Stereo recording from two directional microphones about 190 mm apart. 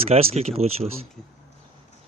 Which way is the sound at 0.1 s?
30° right (ahead or behind).